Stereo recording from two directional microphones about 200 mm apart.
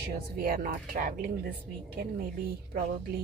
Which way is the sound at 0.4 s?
45° right (ahead or behind).